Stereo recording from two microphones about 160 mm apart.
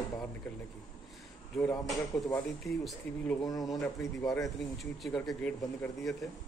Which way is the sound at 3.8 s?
10° left (ahead or behind).